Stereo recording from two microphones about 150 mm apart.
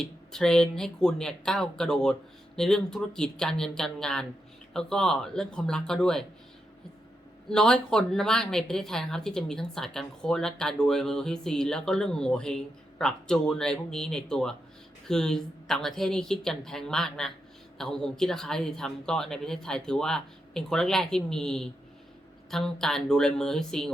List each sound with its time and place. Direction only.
0.0 s speech: 5° left (ahead or behind)
7.5 s speech: 5° left (ahead or behind)